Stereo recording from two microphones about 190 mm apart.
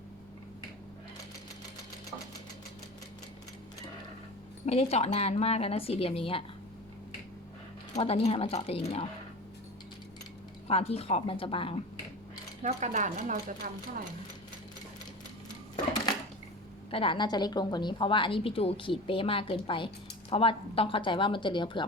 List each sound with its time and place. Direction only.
4.6 s a woman's voice: 35° left (ahead or behind)
7.9 s a woman's voice: 35° left (ahead or behind)
10.7 s a woman's voice: 30° left (ahead or behind)
12.6 s speech: 40° right (ahead or behind)
16.9 s a woman's voice: 25° left (ahead or behind)